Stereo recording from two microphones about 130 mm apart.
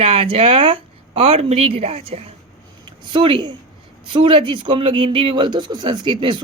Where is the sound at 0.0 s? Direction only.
50° right (ahead or behind).